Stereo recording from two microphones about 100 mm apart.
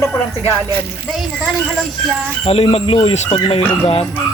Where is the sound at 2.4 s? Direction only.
85° left.